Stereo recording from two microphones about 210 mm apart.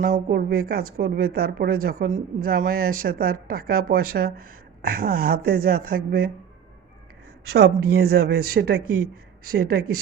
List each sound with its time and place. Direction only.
0.0 s speech: 45° right (ahead or behind)
7.5 s speech: 50° right (ahead or behind)